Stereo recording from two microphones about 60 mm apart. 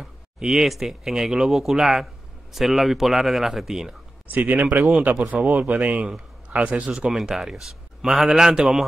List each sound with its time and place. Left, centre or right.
0.0 s speech: centre
4.3 s speech: right
7.1 s speech: centre